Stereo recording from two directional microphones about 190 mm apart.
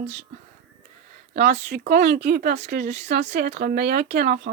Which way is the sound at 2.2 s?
50° right (ahead or behind).